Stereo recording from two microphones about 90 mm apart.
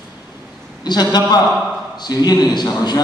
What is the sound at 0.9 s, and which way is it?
A man's voice, 50° left (ahead or behind).